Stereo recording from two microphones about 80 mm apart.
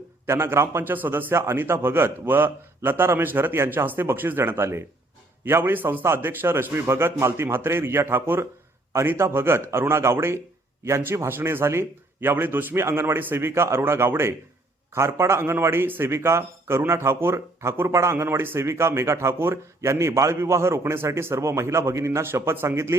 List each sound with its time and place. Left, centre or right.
0.3 s a man's voice: right